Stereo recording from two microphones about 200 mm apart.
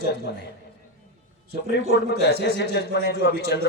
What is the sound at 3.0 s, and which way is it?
Speech, 55° left (ahead or behind).